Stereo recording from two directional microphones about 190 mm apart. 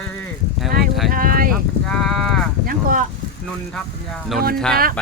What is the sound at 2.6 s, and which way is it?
Speech, 50° right (ahead or behind).